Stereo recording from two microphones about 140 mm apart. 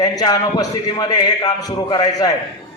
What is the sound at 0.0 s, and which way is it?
A man's voice, 30° left (ahead or behind).